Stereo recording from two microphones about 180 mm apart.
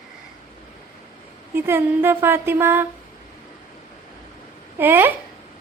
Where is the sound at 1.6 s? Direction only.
10° right (ahead or behind).